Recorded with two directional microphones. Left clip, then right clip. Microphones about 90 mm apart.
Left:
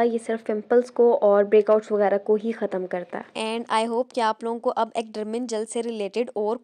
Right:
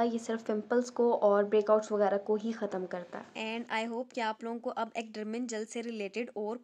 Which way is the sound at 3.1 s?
75° left (ahead or behind).